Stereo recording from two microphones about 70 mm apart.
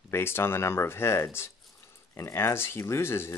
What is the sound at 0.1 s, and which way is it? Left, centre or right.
Speech, left.